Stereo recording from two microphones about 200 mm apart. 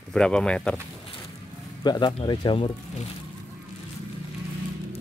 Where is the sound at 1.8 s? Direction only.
20° left (ahead or behind).